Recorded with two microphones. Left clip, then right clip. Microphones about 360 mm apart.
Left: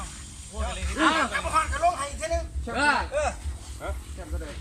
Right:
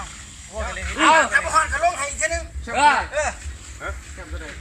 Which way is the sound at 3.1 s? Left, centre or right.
Centre.